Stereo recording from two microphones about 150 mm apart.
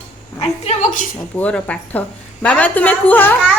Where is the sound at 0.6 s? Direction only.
55° left (ahead or behind).